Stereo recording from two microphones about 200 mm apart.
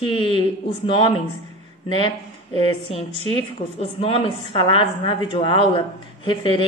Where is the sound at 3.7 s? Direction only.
30° left (ahead or behind).